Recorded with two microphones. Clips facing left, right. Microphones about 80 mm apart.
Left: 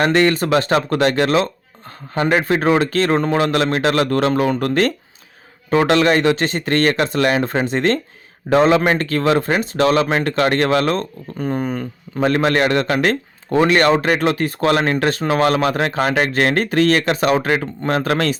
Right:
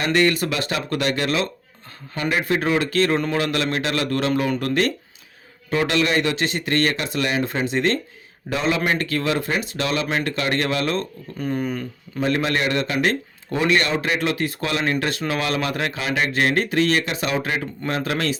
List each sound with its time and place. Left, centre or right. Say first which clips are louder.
0.0 s speech: left 4 dB; left